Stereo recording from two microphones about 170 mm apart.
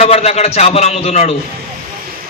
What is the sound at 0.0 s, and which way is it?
A man's voice, 40° left (ahead or behind).